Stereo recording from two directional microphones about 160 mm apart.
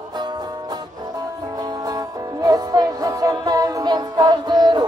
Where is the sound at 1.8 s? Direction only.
25° right (ahead or behind).